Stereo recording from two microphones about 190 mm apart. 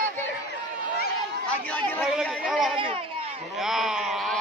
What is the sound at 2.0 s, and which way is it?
Speech, centre (ahead or behind).